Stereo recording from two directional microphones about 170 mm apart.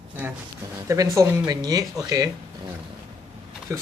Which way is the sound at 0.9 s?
20° right (ahead or behind).